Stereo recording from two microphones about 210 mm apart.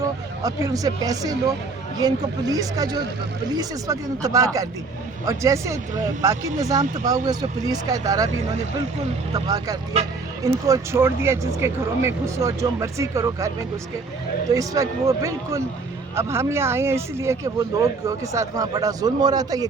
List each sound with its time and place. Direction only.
0.4 s speech: 15° right (ahead or behind)
9.3 s speech: 15° right (ahead or behind)
14.5 s speech: 15° right (ahead or behind)